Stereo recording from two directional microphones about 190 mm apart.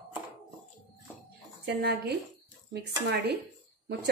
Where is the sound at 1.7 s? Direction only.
60° right (ahead or behind).